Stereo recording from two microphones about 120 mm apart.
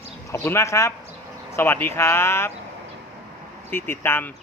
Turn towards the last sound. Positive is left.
turn(degrees=15)  # may be behind; listen again after turning